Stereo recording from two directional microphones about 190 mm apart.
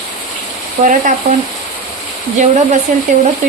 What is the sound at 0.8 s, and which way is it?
Speech, 40° right (ahead or behind).